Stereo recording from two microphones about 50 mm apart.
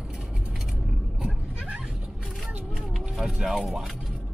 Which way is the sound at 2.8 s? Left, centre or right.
Centre.